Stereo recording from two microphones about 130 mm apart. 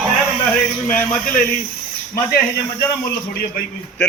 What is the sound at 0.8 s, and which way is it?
Speech, 15° left (ahead or behind).